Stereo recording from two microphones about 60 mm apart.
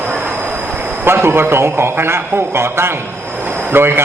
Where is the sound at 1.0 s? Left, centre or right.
Right.